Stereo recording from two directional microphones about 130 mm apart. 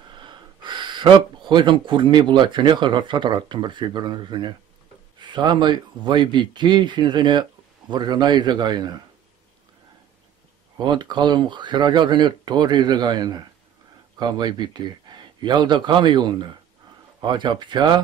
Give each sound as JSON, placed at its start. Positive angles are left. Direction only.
{"t": 0.1, "sound": "speech", "side_deg": -35}
{"t": 10.8, "sound": "speech", "side_deg": -35}